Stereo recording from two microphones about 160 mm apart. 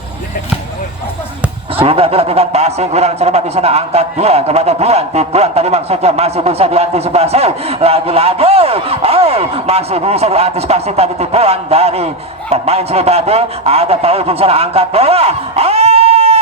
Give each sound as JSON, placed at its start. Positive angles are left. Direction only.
{"t": 1.7, "sound": "a man's voice", "side_deg": -35}